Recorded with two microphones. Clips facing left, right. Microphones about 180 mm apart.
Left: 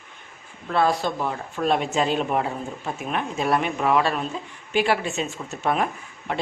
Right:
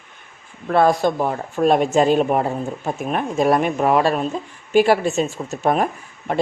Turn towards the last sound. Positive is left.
turn(degrees=-45)  # may be behind; listen again after turning